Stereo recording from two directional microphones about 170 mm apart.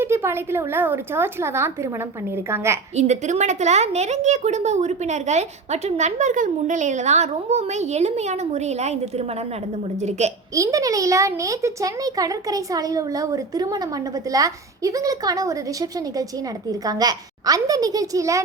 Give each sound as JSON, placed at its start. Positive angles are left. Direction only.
{"t": 0.0, "sound": "speech", "side_deg": -15}
{"t": 2.9, "sound": "a woman's voice", "side_deg": -40}
{"t": 10.5, "sound": "speech", "side_deg": -20}